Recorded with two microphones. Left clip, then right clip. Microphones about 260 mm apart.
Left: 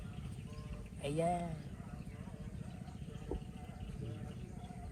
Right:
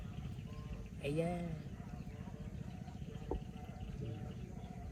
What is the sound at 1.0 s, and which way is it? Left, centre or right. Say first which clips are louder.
Speech: left 3 dB; left.